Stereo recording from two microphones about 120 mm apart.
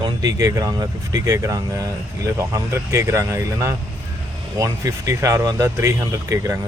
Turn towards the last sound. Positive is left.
turn(degrees=-25)  # may be behind; listen again after turning